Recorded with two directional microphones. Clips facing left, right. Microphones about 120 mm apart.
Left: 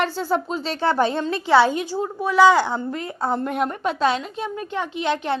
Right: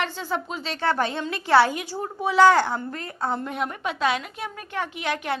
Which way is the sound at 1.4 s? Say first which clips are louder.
Left 2 dB; 20° left (ahead or behind).